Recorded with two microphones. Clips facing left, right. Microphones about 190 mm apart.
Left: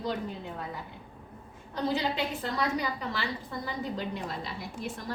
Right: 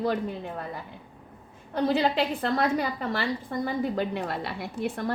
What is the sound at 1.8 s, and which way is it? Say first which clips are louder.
A woman's voice: right 5 dB; 55° right (ahead or behind).